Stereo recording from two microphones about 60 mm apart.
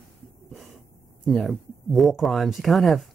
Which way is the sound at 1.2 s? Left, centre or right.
Centre.